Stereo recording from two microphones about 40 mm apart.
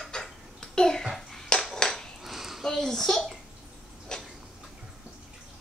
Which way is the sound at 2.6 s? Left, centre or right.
Centre.